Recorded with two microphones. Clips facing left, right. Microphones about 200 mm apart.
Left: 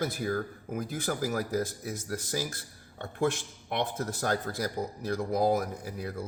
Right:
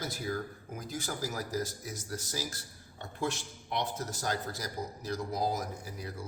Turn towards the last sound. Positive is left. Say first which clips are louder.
# left 5 dB
turn(degrees=55)  # may be behind; listen again after turning